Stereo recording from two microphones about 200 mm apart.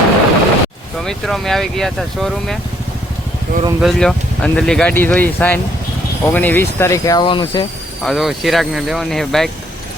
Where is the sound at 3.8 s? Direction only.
5° left (ahead or behind); by 7.6 s 25° left (ahead or behind).